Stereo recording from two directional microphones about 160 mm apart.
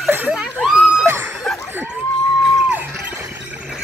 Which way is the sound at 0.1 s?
10° right (ahead or behind).